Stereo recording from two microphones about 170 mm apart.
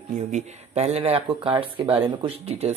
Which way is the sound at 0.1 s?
45° right (ahead or behind).